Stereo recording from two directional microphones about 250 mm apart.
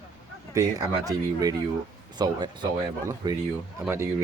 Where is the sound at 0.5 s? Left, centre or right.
Centre.